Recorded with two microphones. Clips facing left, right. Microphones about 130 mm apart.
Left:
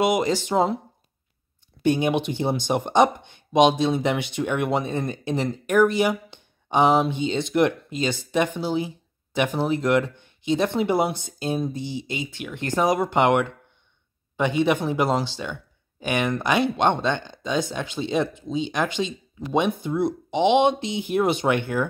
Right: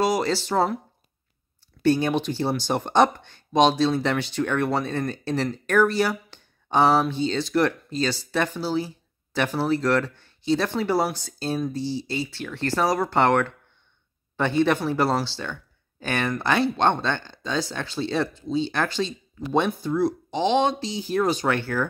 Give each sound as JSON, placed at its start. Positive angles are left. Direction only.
{"t": 0.0, "sound": "speech", "side_deg": 15}
{"t": 1.8, "sound": "speech", "side_deg": 15}